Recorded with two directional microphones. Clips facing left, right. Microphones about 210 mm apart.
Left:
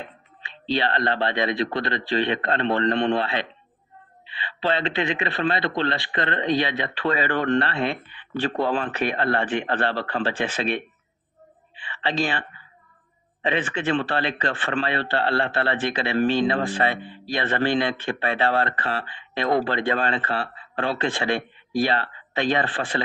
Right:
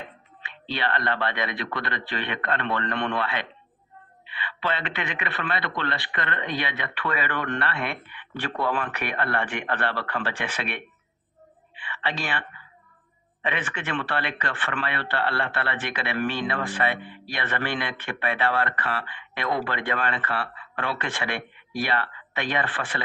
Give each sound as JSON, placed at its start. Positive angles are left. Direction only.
{"t": 0.4, "sound": "a man's voice", "side_deg": 25}
{"t": 11.9, "sound": "speech", "side_deg": 25}
{"t": 13.4, "sound": "a man's voice", "side_deg": 25}